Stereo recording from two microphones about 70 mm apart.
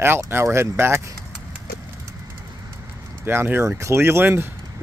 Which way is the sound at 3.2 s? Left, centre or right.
Right.